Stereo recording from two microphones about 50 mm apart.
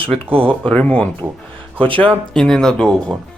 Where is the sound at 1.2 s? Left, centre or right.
Right.